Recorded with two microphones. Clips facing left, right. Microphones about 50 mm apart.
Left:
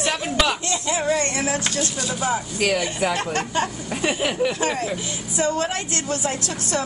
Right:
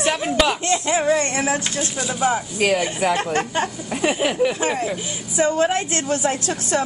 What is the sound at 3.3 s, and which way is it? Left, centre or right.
Speech, centre.